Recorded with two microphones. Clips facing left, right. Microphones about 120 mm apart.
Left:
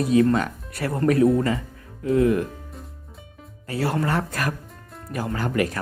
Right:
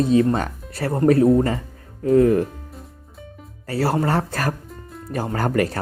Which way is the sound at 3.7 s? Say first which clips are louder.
Right 3 dB; 35° right (ahead or behind).